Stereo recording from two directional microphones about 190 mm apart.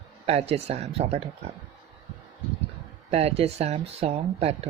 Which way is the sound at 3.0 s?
35° right (ahead or behind).